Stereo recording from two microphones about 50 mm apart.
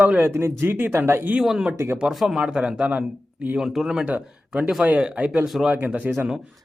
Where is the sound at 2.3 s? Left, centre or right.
Centre.